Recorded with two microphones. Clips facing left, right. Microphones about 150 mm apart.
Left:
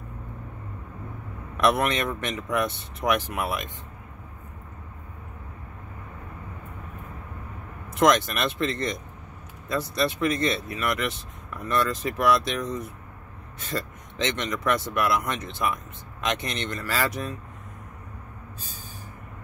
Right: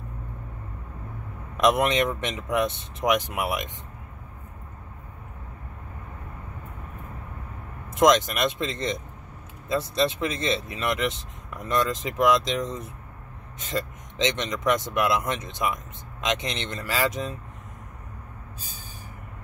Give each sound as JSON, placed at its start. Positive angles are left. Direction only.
{"t": 1.6, "sound": "speech", "side_deg": -20}
{"t": 7.9, "sound": "speech", "side_deg": -20}